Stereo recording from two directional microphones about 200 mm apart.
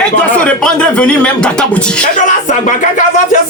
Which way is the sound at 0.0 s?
5° left (ahead or behind).